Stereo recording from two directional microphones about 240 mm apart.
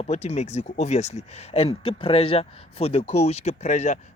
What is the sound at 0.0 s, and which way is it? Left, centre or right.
Speech, left.